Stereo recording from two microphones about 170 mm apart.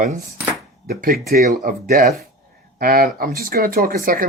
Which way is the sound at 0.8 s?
60° right (ahead or behind).